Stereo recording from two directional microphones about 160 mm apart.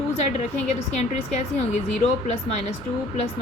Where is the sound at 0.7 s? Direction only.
45° left (ahead or behind).